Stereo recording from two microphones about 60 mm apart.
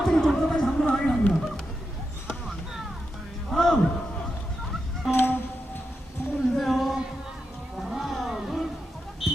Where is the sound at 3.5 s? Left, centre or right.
Centre.